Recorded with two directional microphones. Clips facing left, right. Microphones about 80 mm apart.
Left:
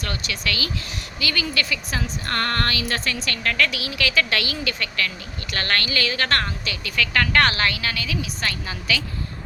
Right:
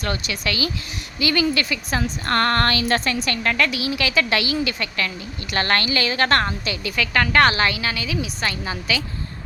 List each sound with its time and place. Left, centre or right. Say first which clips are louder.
0.0 s a woman's voice: right 3 dB; right
3.2 s a woman's voice: right 2 dB; right